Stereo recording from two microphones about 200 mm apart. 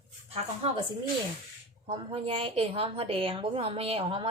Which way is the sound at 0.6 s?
30° right (ahead or behind).